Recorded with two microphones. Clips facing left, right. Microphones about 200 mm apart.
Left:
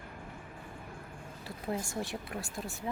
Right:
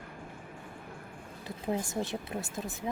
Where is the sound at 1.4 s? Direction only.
20° right (ahead or behind).